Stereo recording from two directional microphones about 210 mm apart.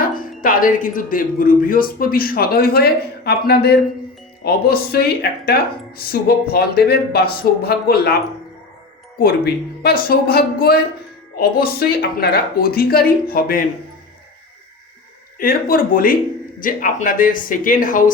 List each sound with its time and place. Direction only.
0.0 s speech: 40° left (ahead or behind)
9.1 s speech: 45° left (ahead or behind)
15.4 s speech: 45° left (ahead or behind)